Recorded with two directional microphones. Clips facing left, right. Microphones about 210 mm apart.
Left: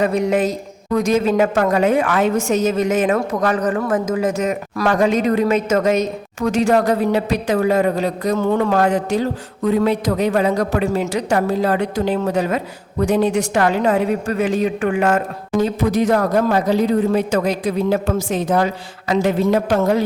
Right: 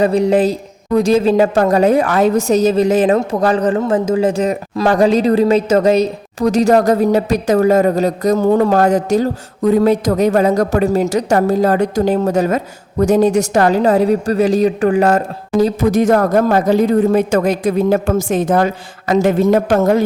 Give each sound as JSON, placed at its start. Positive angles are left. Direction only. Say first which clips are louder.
{"t": 0.0, "sound": "a woman's voice", "louder": "right 5 dB", "side_deg": -30}